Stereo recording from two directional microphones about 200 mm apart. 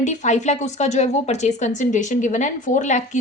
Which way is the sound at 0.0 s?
35° left (ahead or behind).